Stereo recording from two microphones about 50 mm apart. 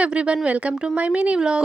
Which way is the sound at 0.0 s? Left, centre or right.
Right.